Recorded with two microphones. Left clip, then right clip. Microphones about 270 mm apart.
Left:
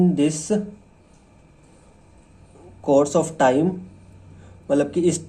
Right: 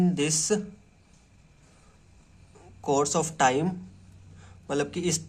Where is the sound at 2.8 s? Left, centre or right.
Right.